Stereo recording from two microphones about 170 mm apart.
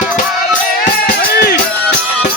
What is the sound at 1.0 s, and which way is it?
Music, 65° left (ahead or behind).